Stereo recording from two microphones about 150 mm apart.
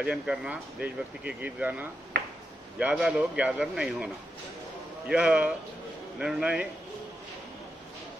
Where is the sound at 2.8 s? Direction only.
5° right (ahead or behind).